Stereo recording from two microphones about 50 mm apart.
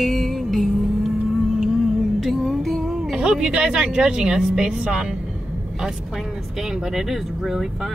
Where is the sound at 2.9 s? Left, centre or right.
Centre.